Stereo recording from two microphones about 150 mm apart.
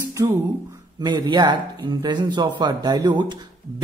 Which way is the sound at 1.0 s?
30° right (ahead or behind).